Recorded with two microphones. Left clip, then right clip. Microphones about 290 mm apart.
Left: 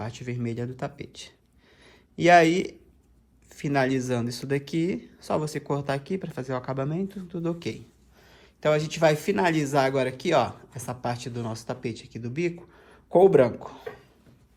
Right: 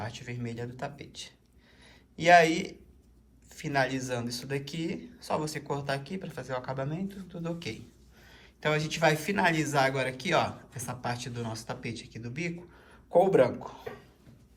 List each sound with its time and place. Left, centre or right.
0.0 s speech: left
1.8 s a sound: left
3.5 s speech: left